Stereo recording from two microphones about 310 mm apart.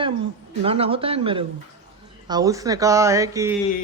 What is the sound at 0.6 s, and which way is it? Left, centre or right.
A man's voice, centre.